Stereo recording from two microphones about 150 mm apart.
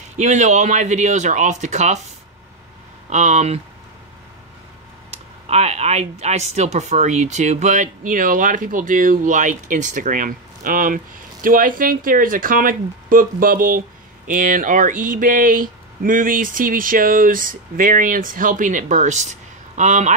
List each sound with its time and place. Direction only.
0.2 s speech: 50° right (ahead or behind)
5.5 s speech: 45° right (ahead or behind)